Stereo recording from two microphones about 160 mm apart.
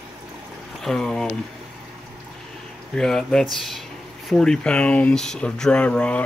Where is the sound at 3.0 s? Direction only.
5° left (ahead or behind).